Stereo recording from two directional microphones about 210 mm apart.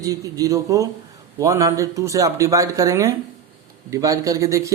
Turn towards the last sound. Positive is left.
turn(degrees=-15)  # may be behind; listen again after turning